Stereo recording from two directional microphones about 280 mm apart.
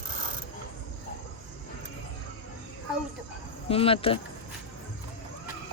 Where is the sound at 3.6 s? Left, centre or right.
Centre.